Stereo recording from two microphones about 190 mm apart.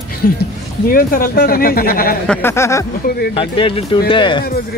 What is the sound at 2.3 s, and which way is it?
Speech, 10° left (ahead or behind).